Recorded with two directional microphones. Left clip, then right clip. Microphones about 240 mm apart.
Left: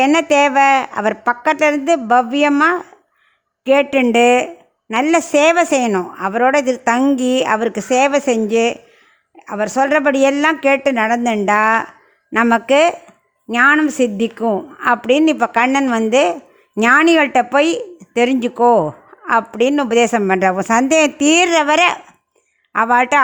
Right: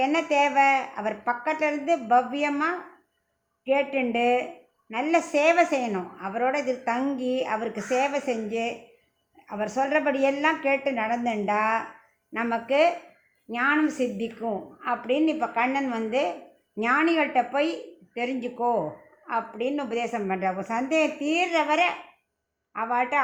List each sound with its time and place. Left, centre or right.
0.0 s speech: left